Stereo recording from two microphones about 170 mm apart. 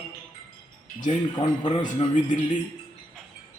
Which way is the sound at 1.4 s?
30° left (ahead or behind).